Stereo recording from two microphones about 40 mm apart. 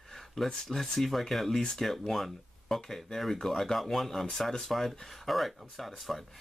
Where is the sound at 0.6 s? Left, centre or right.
Centre.